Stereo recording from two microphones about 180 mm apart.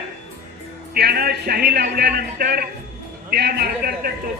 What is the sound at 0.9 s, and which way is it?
A man's voice, 60° right (ahead or behind).